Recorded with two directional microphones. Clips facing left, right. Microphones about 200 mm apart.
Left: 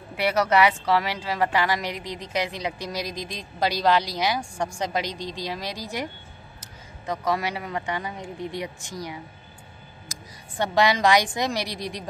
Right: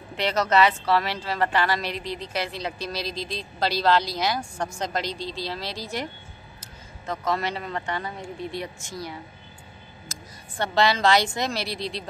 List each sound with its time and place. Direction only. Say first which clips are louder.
0.1 s a woman's voice: left 1 dB; 10° left (ahead or behind)
7.1 s a woman's voice: left 1 dB; 10° left (ahead or behind)
10.1 s a sound: even; 15° left (ahead or behind)
10.6 s a woman's voice: left 1 dB; 15° left (ahead or behind)